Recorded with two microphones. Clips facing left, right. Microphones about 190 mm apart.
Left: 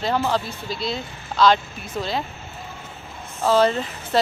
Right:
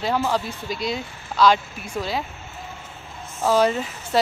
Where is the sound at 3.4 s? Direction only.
10° right (ahead or behind).